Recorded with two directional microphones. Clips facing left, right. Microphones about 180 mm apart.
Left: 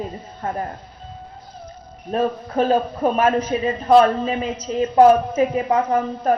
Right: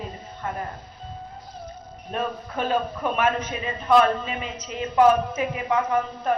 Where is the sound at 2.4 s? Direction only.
35° left (ahead or behind).